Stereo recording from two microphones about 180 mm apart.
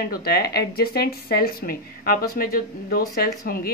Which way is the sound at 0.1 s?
60° left (ahead or behind).